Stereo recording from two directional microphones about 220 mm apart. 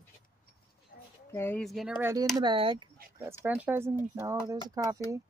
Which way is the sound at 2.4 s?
25° right (ahead or behind).